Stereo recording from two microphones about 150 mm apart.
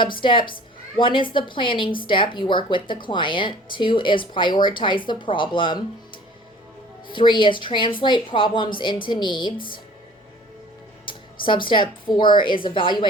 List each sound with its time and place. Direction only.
0.0 s a woman's voice: 35° left (ahead or behind)
7.1 s a woman's voice: 35° left (ahead or behind)
9.6 s speech: 70° left (ahead or behind)
11.0 s music: 35° left (ahead or behind)
11.7 s a woman's voice: 30° left (ahead or behind)